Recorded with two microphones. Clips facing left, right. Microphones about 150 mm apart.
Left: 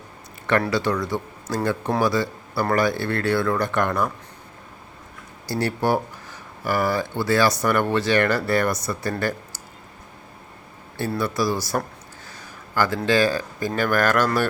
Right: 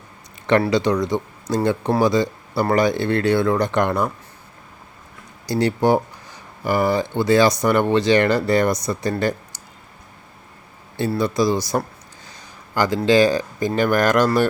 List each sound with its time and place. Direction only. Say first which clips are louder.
0.7 s speech: right 4 dB; 20° right (ahead or behind)
5.5 s speech: right 5 dB; 15° right (ahead or behind)
11.2 s speech: right 4 dB; 15° right (ahead or behind)